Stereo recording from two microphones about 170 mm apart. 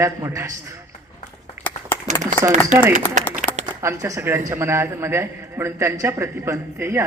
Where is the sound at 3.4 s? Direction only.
45° right (ahead or behind).